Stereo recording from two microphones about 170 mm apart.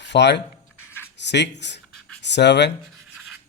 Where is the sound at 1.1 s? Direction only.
90° left.